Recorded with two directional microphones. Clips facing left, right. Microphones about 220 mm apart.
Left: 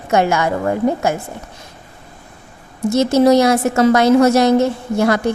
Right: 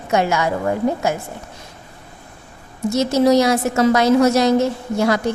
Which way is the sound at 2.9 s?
55° left (ahead or behind).